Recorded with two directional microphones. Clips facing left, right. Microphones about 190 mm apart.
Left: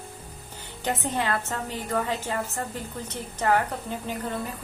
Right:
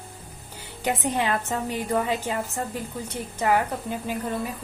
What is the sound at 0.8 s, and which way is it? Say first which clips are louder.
A woman's voice: right 2 dB; 15° right (ahead or behind).